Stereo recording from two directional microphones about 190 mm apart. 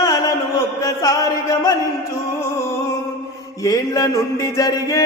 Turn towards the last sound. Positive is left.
turn(degrees=15)  # may be behind; listen again after turning